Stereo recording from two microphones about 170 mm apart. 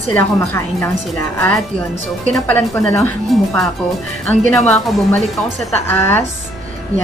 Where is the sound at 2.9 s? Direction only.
15° left (ahead or behind).